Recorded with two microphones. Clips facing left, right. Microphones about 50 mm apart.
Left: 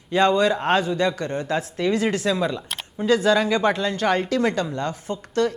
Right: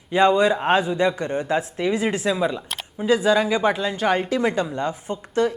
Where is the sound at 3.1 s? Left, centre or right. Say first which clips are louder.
Even; centre.